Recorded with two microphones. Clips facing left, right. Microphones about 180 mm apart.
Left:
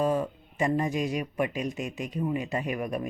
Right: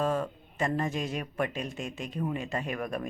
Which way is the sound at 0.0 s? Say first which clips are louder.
Left 3 dB; 15° left (ahead or behind).